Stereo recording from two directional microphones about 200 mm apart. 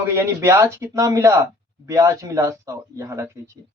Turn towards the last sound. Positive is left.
turn(degrees=-15)  # may be behind; listen again after turning